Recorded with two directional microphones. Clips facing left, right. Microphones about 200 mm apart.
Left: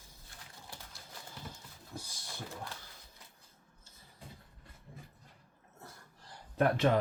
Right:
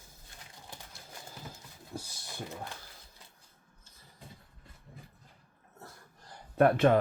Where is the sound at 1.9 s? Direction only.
40° right (ahead or behind).